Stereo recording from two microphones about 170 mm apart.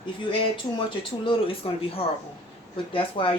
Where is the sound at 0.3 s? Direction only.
30° left (ahead or behind).